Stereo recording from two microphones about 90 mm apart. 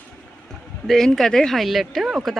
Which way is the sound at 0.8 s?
5° left (ahead or behind).